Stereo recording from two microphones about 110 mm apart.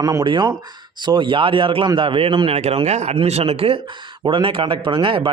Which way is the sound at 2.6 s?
75° right (ahead or behind).